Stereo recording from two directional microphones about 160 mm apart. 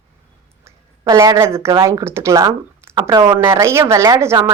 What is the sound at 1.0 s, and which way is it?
Speech, 20° right (ahead or behind).